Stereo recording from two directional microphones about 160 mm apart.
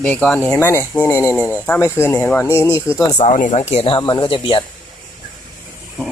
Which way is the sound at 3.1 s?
50° left (ahead or behind).